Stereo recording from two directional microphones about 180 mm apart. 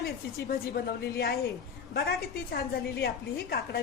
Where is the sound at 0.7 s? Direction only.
60° left (ahead or behind).